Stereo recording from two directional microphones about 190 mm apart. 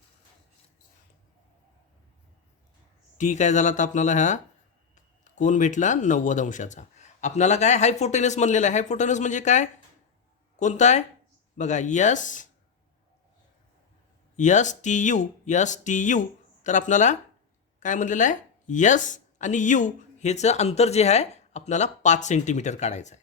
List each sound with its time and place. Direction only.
3.2 s speech: 40° left (ahead or behind)
14.3 s speech: 40° left (ahead or behind)